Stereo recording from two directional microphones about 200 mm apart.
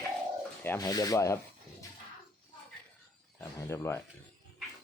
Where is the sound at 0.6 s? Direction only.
15° left (ahead or behind).